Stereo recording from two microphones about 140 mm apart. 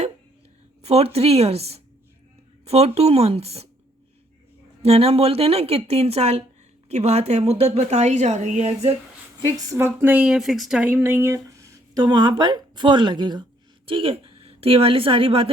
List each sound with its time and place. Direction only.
0.8 s a woman's voice: 45° right (ahead or behind)
4.8 s a woman's voice: 45° right (ahead or behind)
9.6 s a woman's voice: 15° right (ahead or behind); by 15.4 s 40° right (ahead or behind)